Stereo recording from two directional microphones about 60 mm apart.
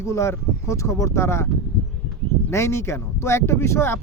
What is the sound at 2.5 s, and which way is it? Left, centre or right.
Speech, left.